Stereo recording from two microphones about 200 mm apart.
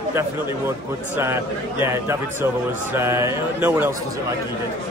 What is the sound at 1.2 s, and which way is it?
A man's voice, 10° right (ahead or behind).